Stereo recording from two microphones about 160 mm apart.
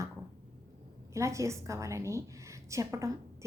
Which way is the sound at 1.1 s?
20° right (ahead or behind).